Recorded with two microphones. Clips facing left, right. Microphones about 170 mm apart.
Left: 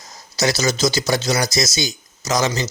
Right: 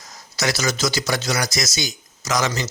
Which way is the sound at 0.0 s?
25° left (ahead or behind).